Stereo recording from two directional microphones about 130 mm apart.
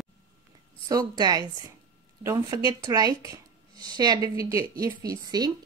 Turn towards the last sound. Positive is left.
turn(degrees=-30)  # may be behind; listen again after turning